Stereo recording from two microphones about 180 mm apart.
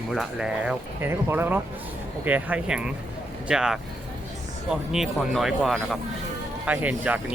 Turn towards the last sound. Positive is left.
turn(degrees=-10)  # may be behind; listen again after turning